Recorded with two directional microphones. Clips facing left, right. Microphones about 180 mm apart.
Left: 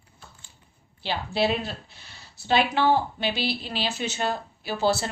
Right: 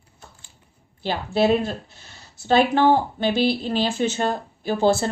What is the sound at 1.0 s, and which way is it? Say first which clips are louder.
Speech: right 5 dB; 45° right (ahead or behind).